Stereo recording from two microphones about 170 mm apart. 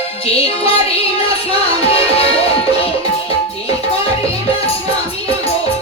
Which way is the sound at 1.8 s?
35° left (ahead or behind).